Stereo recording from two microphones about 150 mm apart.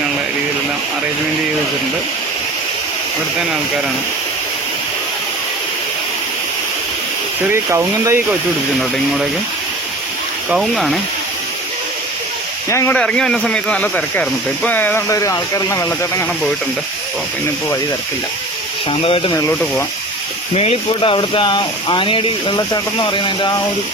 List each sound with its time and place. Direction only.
7.4 s speech: 15° right (ahead or behind)
10.5 s speech: centre (ahead or behind)
12.9 s speech: 5° left (ahead or behind)
18.9 s speech: 35° left (ahead or behind)
20.6 s speech: 40° left (ahead or behind)